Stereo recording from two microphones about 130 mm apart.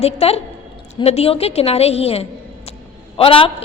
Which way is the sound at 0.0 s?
50° left (ahead or behind).